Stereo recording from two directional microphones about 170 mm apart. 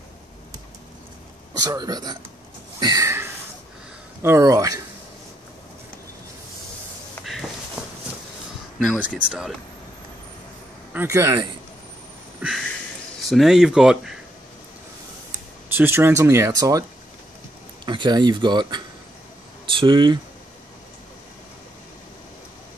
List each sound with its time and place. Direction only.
1.5 s speech: 20° right (ahead or behind)
2.8 s a sound: 20° right (ahead or behind)
4.2 s speech: 15° right (ahead or behind)
8.7 s speech: 5° right (ahead or behind)
10.9 s speech: 15° right (ahead or behind)
12.4 s a sound: 5° right (ahead or behind)
13.3 s speech: centre (ahead or behind)
15.7 s speech: 15° right (ahead or behind)
17.8 s speech: 25° right (ahead or behind)